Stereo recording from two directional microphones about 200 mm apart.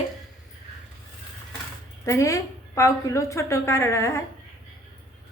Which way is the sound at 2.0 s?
15° left (ahead or behind).